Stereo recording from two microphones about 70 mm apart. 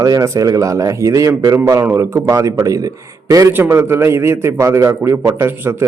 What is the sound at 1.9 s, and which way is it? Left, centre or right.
Speech, right.